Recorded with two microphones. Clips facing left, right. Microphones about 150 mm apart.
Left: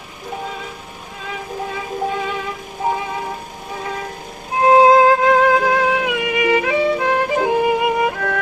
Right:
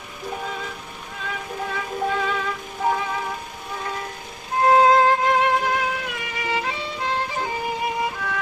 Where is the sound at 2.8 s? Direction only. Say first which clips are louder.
Left 2 dB; 20° left (ahead or behind).